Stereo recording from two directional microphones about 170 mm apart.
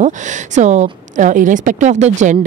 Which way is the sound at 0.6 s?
45° right (ahead or behind).